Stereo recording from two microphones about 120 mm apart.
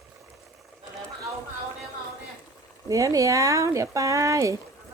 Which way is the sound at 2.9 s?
30° right (ahead or behind).